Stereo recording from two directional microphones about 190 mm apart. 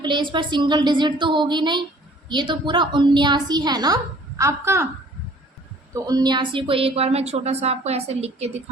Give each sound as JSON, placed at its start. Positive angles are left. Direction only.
{"t": 0.0, "sound": "a woman's voice", "side_deg": -25}
{"t": 5.9, "sound": "a woman's voice", "side_deg": -20}